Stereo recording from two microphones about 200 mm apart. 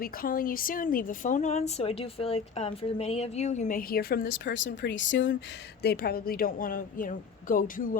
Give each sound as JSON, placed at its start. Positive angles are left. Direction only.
{"t": 0.0, "sound": "a woman's voice", "side_deg": 45}
{"t": 4.5, "sound": "speech", "side_deg": 65}
{"t": 5.8, "sound": "a woman's voice", "side_deg": 50}